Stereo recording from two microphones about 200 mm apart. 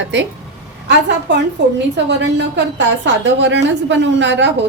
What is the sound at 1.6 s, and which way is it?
A woman's voice, 60° right (ahead or behind).